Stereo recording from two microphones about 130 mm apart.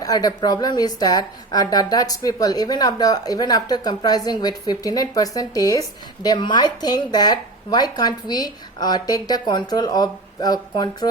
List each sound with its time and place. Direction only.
0.0 s a woman's voice: 30° left (ahead or behind)